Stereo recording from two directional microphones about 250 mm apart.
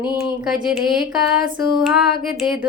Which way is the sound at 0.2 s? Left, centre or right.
Centre.